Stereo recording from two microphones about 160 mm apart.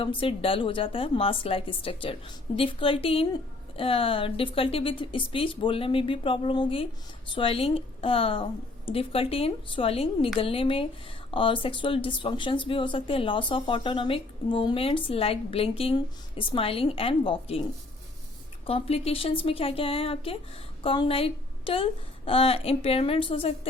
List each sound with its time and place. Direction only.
0.0 s speech: 35° left (ahead or behind)
18.6 s a woman's voice: 35° left (ahead or behind)